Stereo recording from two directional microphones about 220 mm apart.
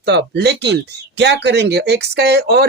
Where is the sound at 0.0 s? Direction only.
50° right (ahead or behind).